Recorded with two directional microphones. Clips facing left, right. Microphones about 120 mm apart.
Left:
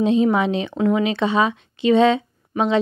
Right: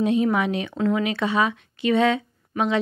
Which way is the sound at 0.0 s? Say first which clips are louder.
Left 3 dB; 25° left (ahead or behind).